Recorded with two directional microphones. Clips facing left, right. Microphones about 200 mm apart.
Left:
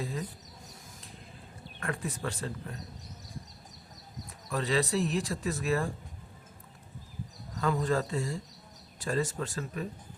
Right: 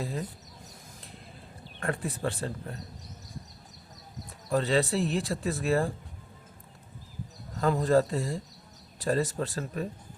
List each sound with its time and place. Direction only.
1.8 s speech: 35° right (ahead or behind)
4.5 s speech: 30° right (ahead or behind)
7.6 s speech: 35° right (ahead or behind)